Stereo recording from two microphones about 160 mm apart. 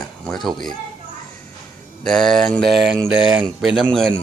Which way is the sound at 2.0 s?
5° left (ahead or behind).